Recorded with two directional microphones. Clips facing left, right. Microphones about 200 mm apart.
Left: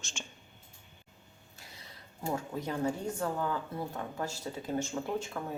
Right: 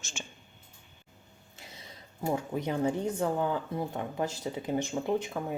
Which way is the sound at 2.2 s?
20° right (ahead or behind).